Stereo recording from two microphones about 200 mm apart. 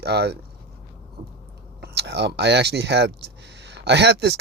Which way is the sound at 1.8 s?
55° right (ahead or behind).